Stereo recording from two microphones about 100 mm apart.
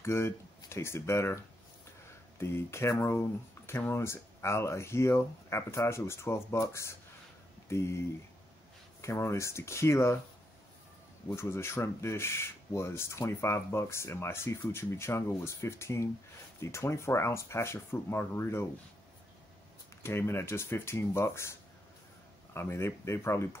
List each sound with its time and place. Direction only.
0.0 s speech: 25° left (ahead or behind)
9.0 s speech: 30° left (ahead or behind)
11.3 s speech: 25° left (ahead or behind)
20.0 s speech: 25° left (ahead or behind)